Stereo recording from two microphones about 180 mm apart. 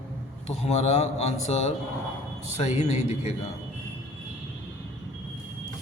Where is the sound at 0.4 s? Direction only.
35° left (ahead or behind).